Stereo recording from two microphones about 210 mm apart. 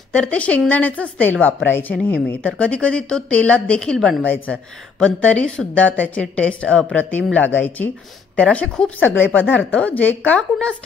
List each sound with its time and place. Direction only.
0.1 s a woman's voice: 5° left (ahead or behind)